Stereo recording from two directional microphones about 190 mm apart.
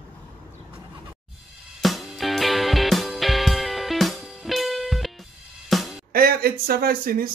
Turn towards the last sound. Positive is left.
turn(degrees=-50)  # may be behind; listen again after turning